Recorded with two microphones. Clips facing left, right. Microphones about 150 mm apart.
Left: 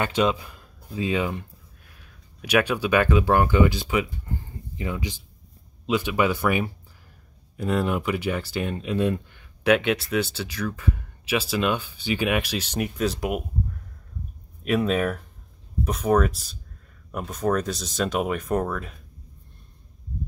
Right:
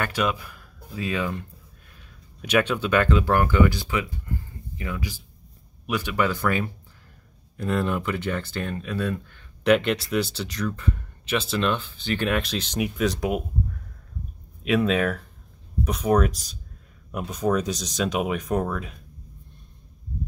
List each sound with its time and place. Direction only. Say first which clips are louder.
0.0 s speech: left 3 dB; 20° left (ahead or behind)
2.0 s speech: right 1 dB; 10° left (ahead or behind)
9.6 s speech: even; 5° left (ahead or behind)
14.6 s speech: right 1 dB; 5° left (ahead or behind)